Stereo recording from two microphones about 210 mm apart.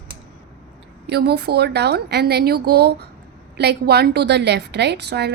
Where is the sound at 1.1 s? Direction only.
50° right (ahead or behind).